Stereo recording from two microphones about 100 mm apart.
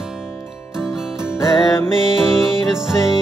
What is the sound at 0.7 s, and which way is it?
Music, 5° right (ahead or behind).